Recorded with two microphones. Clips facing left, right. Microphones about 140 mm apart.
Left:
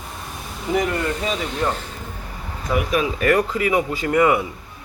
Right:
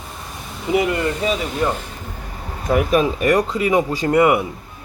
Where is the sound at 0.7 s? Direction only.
10° right (ahead or behind).